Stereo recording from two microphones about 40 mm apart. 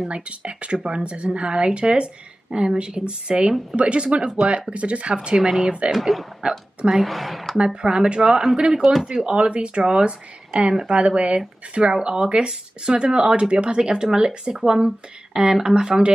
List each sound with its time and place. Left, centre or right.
0.1 s a woman's voice: right
5.9 s speech: centre
7.5 s a woman's voice: right
8.8 s speech: centre
9.2 s a woman's voice: right